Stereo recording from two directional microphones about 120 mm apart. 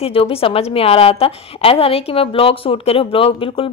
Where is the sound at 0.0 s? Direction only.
50° left (ahead or behind).